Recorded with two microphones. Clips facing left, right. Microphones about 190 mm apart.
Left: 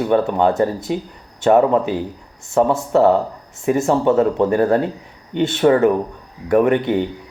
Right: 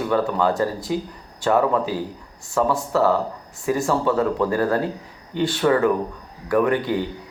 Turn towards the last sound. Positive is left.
turn(degrees=25)  # may be behind; listen again after turning